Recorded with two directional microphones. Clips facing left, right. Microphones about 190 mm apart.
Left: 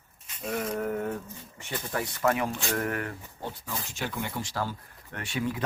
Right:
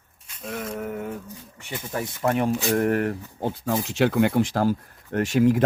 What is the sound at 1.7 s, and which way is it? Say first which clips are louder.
Speech: right 2 dB; 15° right (ahead or behind).